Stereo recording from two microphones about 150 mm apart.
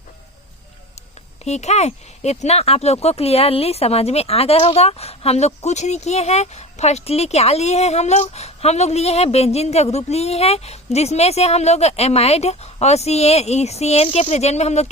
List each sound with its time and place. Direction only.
1.5 s speech: 45° left (ahead or behind)